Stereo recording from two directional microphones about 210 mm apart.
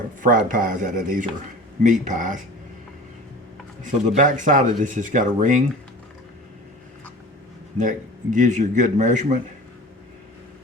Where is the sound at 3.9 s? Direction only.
35° right (ahead or behind).